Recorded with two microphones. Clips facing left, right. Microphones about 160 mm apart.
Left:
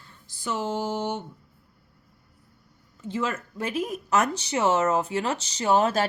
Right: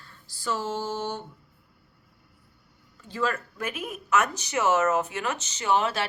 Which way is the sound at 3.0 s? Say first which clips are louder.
Even; 20° left (ahead or behind).